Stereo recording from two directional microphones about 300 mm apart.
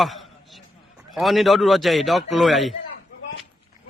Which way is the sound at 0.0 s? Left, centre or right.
Centre.